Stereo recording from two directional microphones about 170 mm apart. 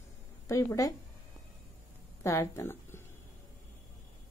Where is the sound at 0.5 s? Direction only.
20° left (ahead or behind).